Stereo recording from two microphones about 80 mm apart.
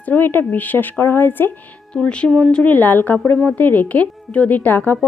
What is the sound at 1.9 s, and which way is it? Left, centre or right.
A woman's voice, centre.